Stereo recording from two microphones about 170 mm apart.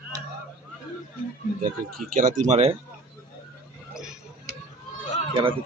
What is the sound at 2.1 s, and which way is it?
Speech, 50° right (ahead or behind).